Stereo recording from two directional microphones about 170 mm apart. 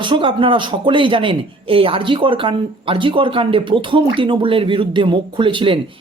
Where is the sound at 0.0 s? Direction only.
30° right (ahead or behind).